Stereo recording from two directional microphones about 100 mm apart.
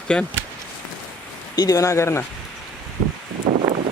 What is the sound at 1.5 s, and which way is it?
Speech, 35° left (ahead or behind).